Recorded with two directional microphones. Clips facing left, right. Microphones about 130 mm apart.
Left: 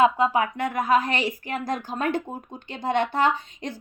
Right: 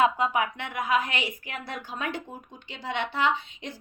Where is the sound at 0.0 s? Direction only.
30° left (ahead or behind).